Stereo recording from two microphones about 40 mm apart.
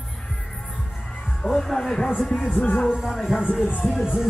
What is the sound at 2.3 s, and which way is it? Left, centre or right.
Speech, left.